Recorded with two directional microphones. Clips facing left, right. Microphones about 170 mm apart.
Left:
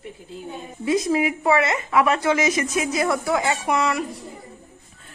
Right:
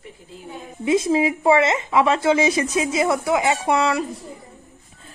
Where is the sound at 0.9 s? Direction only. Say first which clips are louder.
Right 2 dB; 25° right (ahead or behind).